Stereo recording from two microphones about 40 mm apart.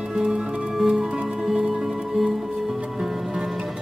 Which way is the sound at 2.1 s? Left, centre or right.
Centre.